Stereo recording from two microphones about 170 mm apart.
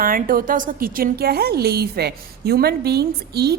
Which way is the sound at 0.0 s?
55° right (ahead or behind).